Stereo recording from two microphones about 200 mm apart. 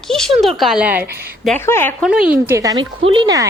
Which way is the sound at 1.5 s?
10° left (ahead or behind).